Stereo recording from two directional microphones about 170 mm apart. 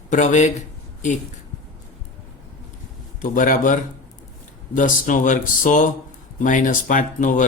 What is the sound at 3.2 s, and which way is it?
A man's voice, 50° left (ahead or behind).